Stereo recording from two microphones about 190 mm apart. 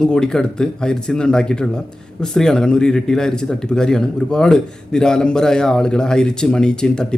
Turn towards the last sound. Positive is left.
turn(degrees=5)  # may be behind; listen again after turning